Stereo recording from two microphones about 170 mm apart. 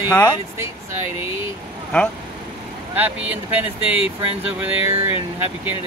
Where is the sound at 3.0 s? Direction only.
10° right (ahead or behind).